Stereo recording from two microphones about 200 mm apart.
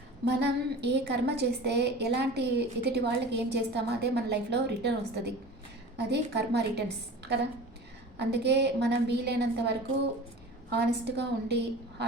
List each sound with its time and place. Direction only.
0.3 s a woman's voice: 55° right (ahead or behind)